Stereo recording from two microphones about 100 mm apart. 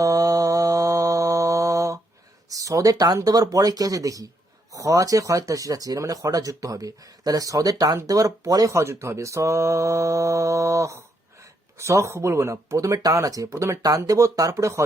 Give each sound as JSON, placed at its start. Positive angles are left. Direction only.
{"t": 0.0, "sound": "mantra", "side_deg": -35}
{"t": 2.5, "sound": "speech", "side_deg": -35}